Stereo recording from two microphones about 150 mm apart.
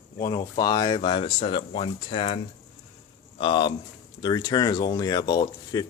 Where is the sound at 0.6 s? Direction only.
25° left (ahead or behind).